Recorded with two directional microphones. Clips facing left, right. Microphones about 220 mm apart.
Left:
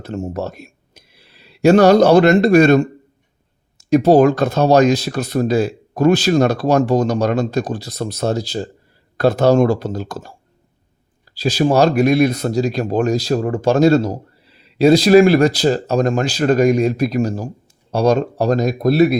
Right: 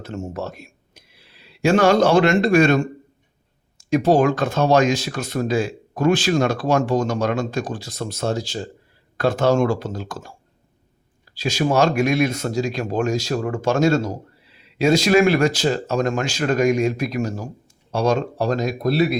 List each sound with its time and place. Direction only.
0.0 s speech: 35° left (ahead or behind)
11.3 s speech: 35° left (ahead or behind)